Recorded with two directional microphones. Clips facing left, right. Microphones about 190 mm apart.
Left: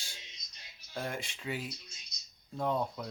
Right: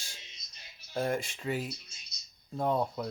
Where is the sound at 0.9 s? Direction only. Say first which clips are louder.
Right 7 dB; 40° right (ahead or behind).